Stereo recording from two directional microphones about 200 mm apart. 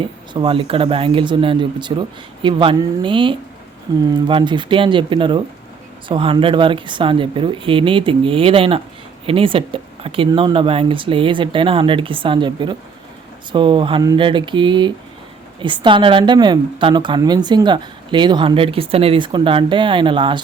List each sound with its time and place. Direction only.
0.0 s a woman's voice: 25° right (ahead or behind)